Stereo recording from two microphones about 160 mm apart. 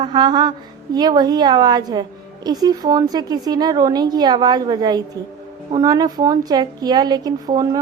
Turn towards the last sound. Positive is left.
turn(degrees=-25)  # may be behind; listen again after turning